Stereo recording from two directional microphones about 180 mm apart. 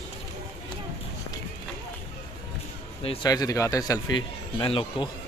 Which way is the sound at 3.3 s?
20° left (ahead or behind).